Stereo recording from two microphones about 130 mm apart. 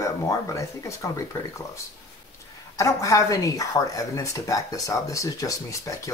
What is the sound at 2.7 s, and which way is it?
Speech, 25° left (ahead or behind).